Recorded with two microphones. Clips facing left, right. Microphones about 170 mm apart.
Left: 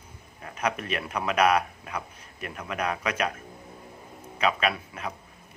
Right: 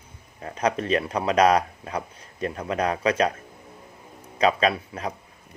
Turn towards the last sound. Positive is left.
turn(degrees=-35)  # may be behind; listen again after turning